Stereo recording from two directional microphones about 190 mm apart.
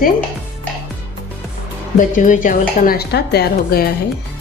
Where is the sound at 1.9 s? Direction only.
45° left (ahead or behind).